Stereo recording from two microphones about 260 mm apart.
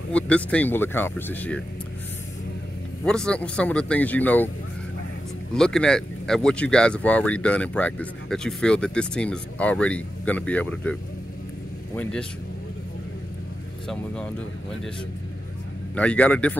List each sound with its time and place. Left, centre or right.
0.1 s speech: centre
3.1 s speech: centre
5.5 s speech: centre
13.8 s speech: centre
15.9 s speech: centre